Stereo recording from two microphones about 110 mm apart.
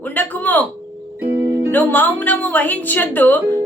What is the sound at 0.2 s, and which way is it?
Speech, 15° left (ahead or behind).